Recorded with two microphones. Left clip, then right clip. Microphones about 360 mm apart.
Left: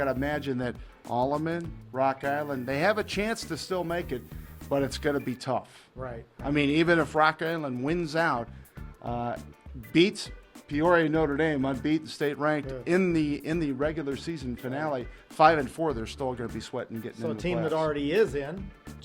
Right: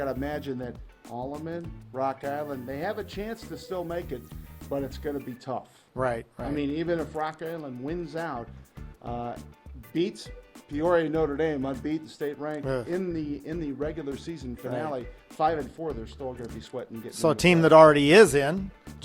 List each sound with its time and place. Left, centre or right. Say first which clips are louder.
0.0 s a man's voice: left 2 dB; centre
1.1 s speech: left 9 dB; left
1.5 s a man's voice: left 4 dB; centre
6.0 s speech: right 11 dB; right
6.5 s a man's voice: left 6 dB; left
17.2 s speech: right 9 dB; right